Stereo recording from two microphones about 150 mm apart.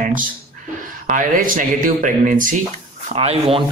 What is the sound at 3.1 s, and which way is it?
Speech, 40° right (ahead or behind).